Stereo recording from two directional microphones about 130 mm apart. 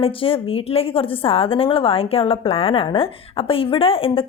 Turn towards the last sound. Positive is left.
turn(degrees=45)  # may be behind; listen again after turning